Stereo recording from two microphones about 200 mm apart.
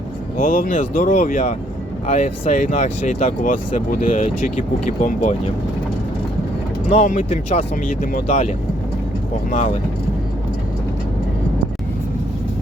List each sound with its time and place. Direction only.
0.3 s speech: 45° left (ahead or behind)
6.9 s speech: 40° left (ahead or behind)